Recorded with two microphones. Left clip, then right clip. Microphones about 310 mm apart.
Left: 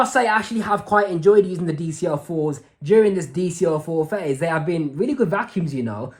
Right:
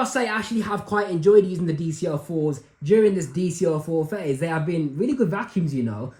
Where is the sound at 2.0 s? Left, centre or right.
Left.